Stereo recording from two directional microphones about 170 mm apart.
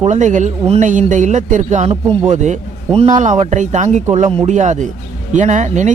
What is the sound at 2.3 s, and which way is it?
A man's voice, 45° right (ahead or behind).